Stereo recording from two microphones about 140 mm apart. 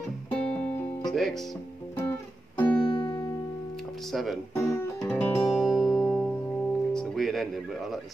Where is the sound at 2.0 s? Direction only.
15° left (ahead or behind).